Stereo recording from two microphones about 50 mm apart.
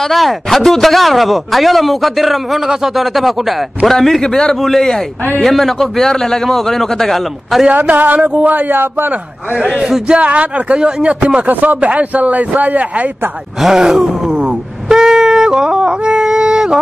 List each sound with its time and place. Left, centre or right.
0.1 s a man's voice: centre
7.7 s speech: right
9.7 s speech: centre
10.0 s speech: right
11.4 s speech: right
13.7 s groan: centre